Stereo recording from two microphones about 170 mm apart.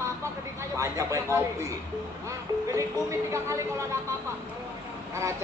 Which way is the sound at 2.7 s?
15° right (ahead or behind).